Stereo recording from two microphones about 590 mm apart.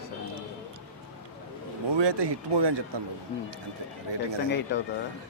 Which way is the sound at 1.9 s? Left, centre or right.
Right.